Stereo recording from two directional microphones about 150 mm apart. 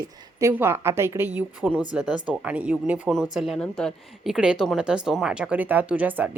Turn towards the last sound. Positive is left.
turn(degrees=-10)  # may be behind; listen again after turning